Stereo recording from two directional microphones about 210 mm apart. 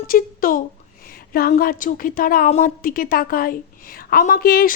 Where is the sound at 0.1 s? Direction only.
40° left (ahead or behind).